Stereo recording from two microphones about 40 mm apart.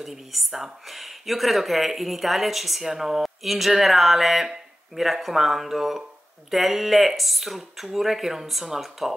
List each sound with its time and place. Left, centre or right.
0.0 s speech: centre